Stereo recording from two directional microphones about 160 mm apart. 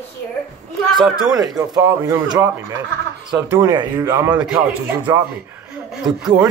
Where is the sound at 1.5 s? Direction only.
20° right (ahead or behind).